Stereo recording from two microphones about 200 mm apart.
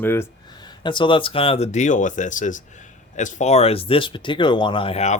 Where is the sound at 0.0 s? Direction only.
10° left (ahead or behind).